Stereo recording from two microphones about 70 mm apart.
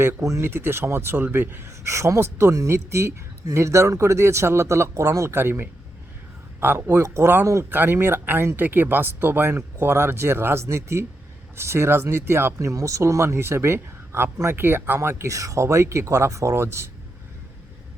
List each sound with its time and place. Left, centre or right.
0.0 s speech: right
0.4 s speech: right
12.5 s speech: right
15.3 s speech: right